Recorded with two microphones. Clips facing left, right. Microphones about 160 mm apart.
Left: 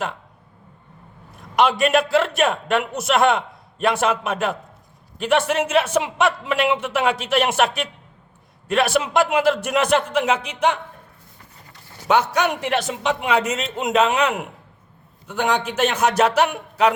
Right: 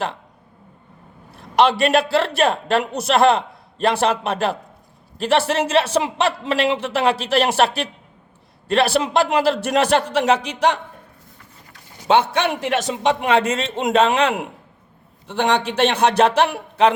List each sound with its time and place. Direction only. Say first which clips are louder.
1.4 s a sound: right 2 dB; 30° right (ahead or behind)
1.8 s a man's voice: even; 35° right (ahead or behind)
11.9 s a man's voice: right 2 dB; 25° right (ahead or behind)